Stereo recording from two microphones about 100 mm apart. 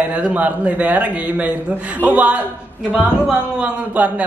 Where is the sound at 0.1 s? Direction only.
15° right (ahead or behind).